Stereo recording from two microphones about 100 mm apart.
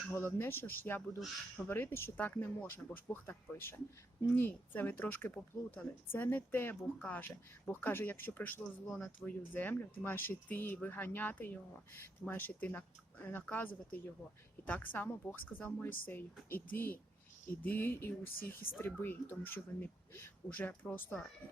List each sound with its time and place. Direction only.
0.1 s speech: 20° left (ahead or behind)